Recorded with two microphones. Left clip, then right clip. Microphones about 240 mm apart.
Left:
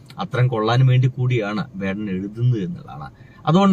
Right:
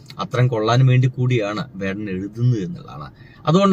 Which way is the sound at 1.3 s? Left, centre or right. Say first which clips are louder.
Right 1 dB; centre.